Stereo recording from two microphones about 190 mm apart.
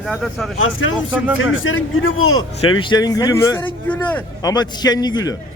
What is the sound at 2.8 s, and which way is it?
A man's voice, 20° left (ahead or behind).